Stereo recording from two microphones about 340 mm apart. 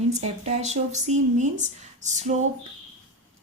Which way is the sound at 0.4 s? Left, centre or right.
Centre.